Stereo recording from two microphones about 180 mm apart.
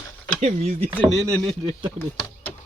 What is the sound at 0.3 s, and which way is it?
Speech, 35° right (ahead or behind).